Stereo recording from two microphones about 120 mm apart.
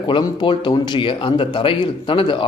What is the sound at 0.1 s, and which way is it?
Speech, 40° left (ahead or behind).